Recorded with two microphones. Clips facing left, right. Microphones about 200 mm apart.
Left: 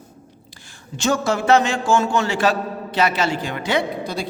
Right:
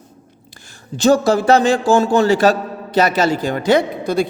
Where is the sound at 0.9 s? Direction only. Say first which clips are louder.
Right 7 dB; 35° right (ahead or behind).